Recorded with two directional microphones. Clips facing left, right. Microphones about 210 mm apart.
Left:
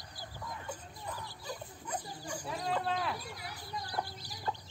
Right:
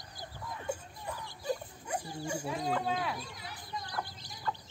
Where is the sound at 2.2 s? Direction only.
25° right (ahead or behind).